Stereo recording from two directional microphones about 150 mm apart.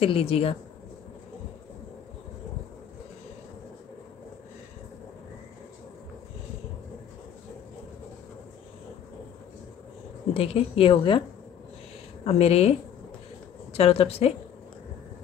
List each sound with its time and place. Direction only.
0.0 s a woman's voice: 40° left (ahead or behind)
10.3 s a woman's voice: 40° left (ahead or behind)
12.3 s a woman's voice: 40° left (ahead or behind)
13.7 s a woman's voice: 40° left (ahead or behind)